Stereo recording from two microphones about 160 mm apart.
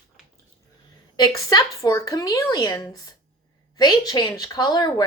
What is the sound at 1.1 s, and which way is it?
Speech, 25° left (ahead or behind).